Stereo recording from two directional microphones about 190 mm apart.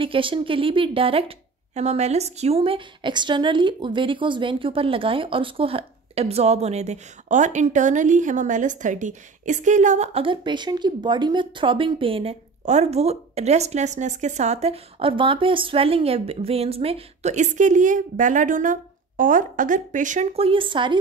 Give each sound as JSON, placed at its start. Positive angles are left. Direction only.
{"t": 0.0, "sound": "a woman's voice", "side_deg": -25}